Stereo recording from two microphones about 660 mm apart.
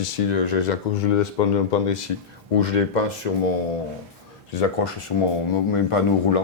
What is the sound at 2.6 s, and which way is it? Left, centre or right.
Speech, left.